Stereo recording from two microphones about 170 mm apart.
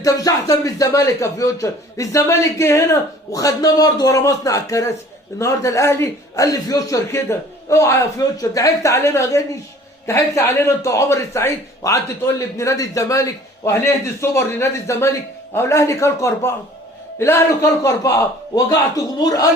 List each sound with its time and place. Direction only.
0.0 s a man's voice: 20° left (ahead or behind)